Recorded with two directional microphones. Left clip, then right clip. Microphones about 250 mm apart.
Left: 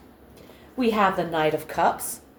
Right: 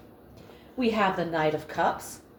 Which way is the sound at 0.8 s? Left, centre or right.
Left.